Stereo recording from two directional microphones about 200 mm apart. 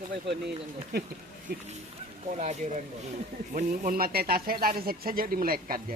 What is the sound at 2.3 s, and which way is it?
Speech, 35° right (ahead or behind).